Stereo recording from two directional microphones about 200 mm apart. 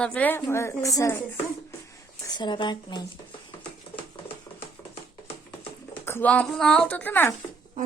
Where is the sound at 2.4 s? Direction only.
25° left (ahead or behind).